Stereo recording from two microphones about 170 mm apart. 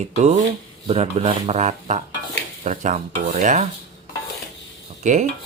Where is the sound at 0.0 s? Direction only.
40° right (ahead or behind).